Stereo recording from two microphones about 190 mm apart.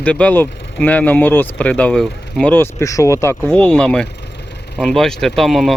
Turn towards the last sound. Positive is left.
turn(degrees=0)  # may be behind; listen again after turning